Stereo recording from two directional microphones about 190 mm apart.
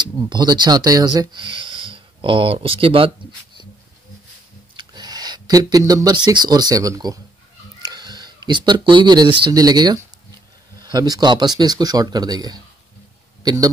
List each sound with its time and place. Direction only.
0.0 s speech: 25° right (ahead or behind)
4.7 s speech: 20° right (ahead or behind)
13.4 s a sound: 20° right (ahead or behind)